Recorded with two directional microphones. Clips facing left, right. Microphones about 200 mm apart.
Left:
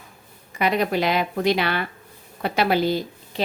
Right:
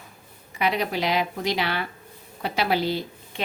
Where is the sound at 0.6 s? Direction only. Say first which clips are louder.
Left 4 dB; 50° left (ahead or behind).